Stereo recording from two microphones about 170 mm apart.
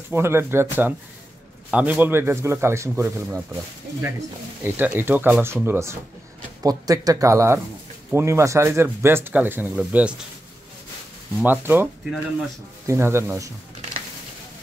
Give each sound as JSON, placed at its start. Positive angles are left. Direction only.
{"t": 0.1, "sound": "speech", "side_deg": -15}
{"t": 4.6, "sound": "speech", "side_deg": -10}
{"t": 11.4, "sound": "speech", "side_deg": -10}